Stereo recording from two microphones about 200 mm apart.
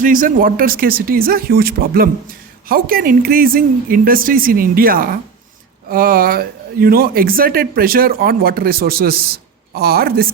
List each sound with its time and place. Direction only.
0.0 s speech: 40° right (ahead or behind)